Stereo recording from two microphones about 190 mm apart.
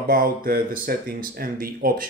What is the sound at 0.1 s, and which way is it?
Speech, 50° right (ahead or behind).